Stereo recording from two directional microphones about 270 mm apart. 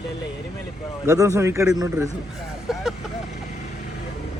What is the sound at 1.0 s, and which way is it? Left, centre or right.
A man's voice, centre.